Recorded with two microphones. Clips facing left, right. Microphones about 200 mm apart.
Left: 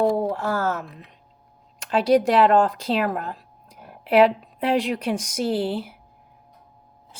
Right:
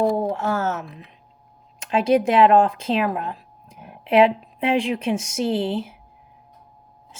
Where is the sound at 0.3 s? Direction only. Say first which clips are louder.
Right 1 dB; 25° right (ahead or behind).